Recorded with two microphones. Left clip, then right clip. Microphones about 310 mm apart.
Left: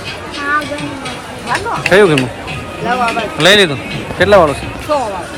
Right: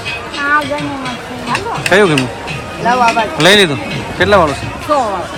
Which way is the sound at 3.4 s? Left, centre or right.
Centre.